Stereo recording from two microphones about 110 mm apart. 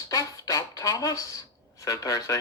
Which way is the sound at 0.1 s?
30° left (ahead or behind).